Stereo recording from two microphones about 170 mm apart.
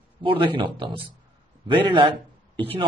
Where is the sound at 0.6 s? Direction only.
30° right (ahead or behind).